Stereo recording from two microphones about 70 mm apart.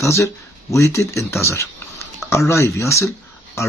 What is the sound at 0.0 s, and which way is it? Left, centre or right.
Speech, left.